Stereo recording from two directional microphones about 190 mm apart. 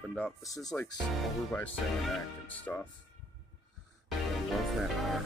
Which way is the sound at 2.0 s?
5° left (ahead or behind).